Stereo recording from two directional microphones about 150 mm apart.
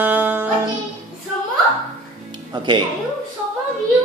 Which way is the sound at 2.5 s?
30° right (ahead or behind).